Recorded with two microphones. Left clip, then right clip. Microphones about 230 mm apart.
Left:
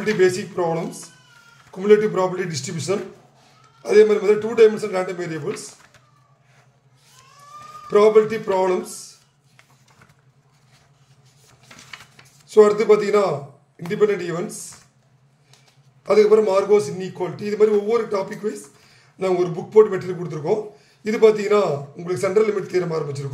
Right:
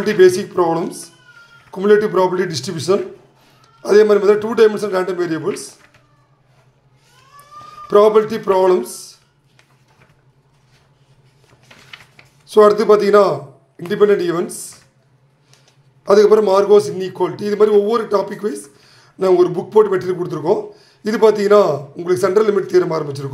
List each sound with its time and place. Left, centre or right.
0.0 s a man's voice: right
1.7 s a man's voice: centre
7.9 s a man's voice: right
12.5 s a man's voice: right
16.1 s a man's voice: centre